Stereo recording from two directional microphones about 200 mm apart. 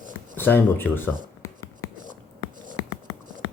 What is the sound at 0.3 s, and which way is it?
Speech, 10° left (ahead or behind).